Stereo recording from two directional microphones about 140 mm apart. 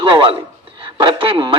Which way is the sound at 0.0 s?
35° right (ahead or behind).